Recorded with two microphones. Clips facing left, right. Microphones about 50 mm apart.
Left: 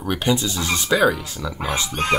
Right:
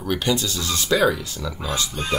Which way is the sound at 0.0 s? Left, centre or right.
Centre.